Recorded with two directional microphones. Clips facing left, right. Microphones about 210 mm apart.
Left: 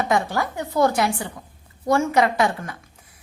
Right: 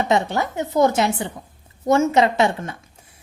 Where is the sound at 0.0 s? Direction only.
25° right (ahead or behind).